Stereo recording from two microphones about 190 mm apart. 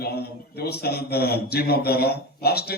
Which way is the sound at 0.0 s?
55° left (ahead or behind).